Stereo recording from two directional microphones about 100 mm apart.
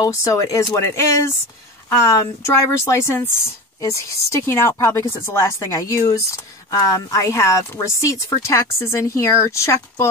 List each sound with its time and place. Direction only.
0.0 s speech: 35° left (ahead or behind)